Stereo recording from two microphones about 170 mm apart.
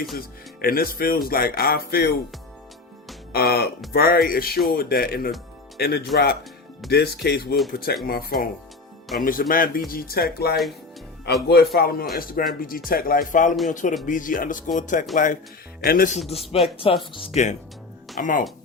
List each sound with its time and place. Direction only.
0.2 s speech: 60° left (ahead or behind)
3.3 s speech: 65° left (ahead or behind)
16.3 s speech: 35° left (ahead or behind); by 18.4 s 50° left (ahead or behind)